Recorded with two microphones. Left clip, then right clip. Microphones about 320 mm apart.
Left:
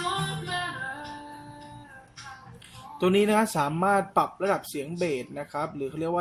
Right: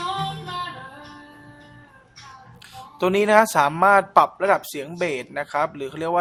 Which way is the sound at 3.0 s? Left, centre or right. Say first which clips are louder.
Right 6 dB; centre.